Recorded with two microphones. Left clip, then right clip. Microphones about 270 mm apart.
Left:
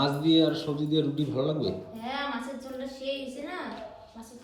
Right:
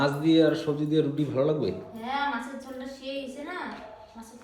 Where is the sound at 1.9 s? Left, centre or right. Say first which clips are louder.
Right 4 dB; centre.